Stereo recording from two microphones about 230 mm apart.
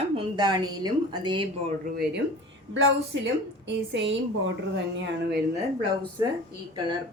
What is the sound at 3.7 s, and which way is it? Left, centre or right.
Speech, right.